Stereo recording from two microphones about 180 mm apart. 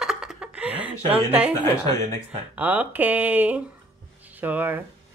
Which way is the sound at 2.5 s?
10° right (ahead or behind).